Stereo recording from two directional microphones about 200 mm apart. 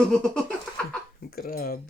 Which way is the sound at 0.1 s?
5° left (ahead or behind).